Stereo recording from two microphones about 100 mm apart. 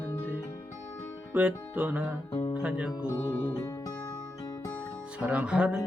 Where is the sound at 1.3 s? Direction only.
15° right (ahead or behind).